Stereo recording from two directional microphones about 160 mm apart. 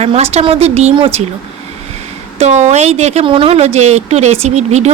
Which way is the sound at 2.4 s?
45° right (ahead or behind).